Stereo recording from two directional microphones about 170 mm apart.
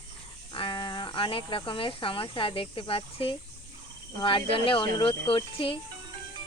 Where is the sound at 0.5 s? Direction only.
30° left (ahead or behind).